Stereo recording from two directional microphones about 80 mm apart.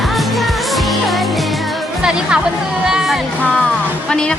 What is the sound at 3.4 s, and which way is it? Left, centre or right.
Music, centre.